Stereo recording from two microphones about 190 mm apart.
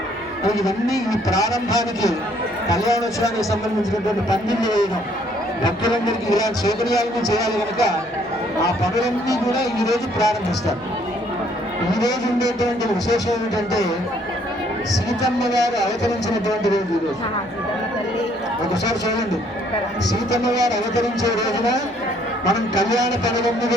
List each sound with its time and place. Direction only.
0.4 s speech: 20° left (ahead or behind)
11.9 s speech: 20° left (ahead or behind)
15.5 s speech: 20° left (ahead or behind)
18.7 s speech: 20° left (ahead or behind)
20.4 s speech: 20° left (ahead or behind)